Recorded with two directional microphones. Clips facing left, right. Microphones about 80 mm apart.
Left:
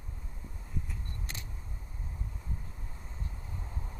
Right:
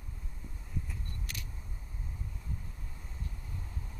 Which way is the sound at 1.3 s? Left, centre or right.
Left.